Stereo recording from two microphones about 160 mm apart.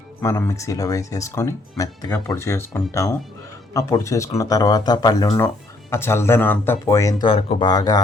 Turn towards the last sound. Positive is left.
turn(degrees=25)  # may be behind; listen again after turning